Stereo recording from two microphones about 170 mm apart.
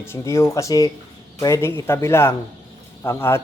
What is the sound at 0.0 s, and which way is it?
Speech, 15° left (ahead or behind).